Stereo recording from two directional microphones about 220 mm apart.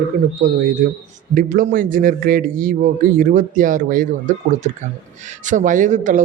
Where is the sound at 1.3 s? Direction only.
40° right (ahead or behind).